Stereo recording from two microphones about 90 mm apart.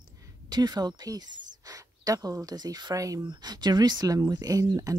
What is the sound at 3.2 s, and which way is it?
Speech, 50° right (ahead or behind).